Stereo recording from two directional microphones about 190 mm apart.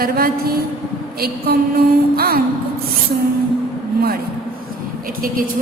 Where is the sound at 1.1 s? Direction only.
55° right (ahead or behind).